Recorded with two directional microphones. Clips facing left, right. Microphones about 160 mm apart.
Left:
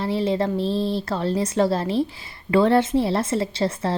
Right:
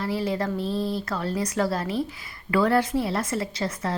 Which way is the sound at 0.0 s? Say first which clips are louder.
Left 4 dB; 25° left (ahead or behind).